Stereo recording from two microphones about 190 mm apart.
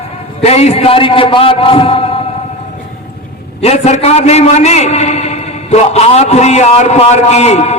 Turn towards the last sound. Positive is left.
turn(degrees=35)  # may be behind; listen again after turning